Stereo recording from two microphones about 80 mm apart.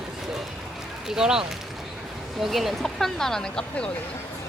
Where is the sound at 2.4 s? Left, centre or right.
Centre.